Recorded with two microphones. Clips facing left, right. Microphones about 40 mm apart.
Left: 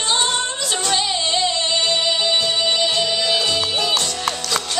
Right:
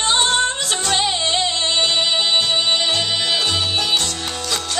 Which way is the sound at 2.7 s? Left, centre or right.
Right.